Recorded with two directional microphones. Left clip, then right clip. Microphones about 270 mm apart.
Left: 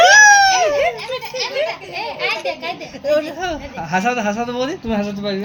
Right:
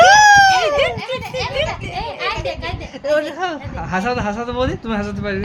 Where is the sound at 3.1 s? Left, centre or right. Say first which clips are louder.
Even; right.